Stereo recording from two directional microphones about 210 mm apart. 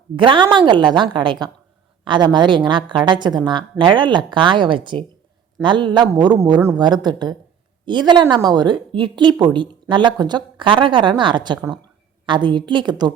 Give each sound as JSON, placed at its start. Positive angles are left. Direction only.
{"t": 0.2, "sound": "a woman's voice", "side_deg": -20}